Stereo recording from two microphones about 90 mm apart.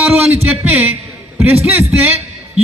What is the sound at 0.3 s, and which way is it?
A man's voice, 15° right (ahead or behind).